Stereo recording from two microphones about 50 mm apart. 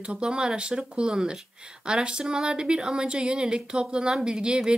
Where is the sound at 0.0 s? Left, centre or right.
Centre.